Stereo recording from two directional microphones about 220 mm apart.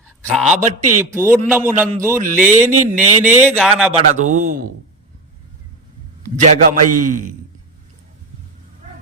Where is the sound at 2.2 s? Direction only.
35° right (ahead or behind).